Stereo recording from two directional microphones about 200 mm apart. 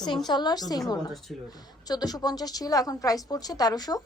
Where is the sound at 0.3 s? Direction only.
20° left (ahead or behind).